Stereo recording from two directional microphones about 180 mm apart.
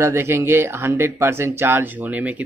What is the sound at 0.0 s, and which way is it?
Speech, 15° right (ahead or behind).